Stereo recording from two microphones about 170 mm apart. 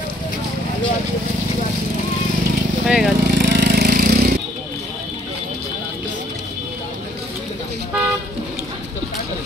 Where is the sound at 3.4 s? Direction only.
75° right (ahead or behind).